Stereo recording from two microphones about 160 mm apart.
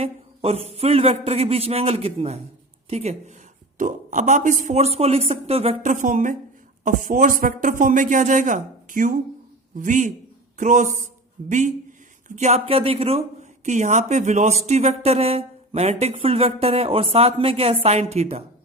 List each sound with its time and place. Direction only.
0.0 s a man's voice: 40° right (ahead or behind)